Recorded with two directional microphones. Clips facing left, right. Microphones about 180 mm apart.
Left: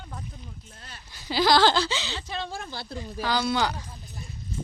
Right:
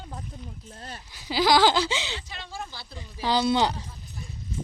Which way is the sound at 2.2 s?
60° left (ahead or behind).